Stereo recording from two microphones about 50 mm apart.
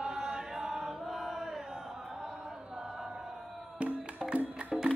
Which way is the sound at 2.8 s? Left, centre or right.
Centre.